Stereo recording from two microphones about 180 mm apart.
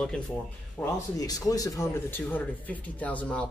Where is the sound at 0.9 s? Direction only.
20° left (ahead or behind).